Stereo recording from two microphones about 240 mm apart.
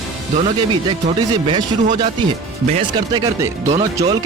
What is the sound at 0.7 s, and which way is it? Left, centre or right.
Speech, right.